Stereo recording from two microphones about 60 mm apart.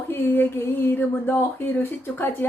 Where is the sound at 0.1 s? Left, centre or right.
Left.